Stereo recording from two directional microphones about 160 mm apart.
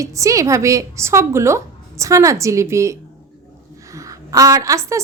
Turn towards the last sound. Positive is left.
turn(degrees=-20)  # may be behind; listen again after turning